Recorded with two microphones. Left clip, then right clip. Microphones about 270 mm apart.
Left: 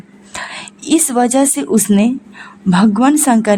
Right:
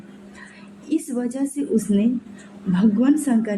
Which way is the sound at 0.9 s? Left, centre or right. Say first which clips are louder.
Left 12 dB; left.